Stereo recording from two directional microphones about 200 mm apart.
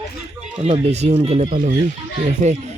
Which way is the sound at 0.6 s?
35° right (ahead or behind).